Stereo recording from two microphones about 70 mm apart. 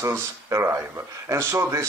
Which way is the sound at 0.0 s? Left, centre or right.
Right.